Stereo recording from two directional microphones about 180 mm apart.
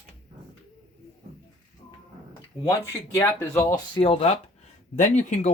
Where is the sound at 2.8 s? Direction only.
15° left (ahead or behind).